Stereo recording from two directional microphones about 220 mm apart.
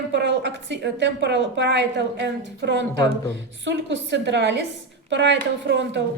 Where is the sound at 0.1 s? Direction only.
50° right (ahead or behind).